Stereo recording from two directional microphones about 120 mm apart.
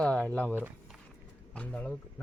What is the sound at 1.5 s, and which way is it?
Speech, 10° left (ahead or behind).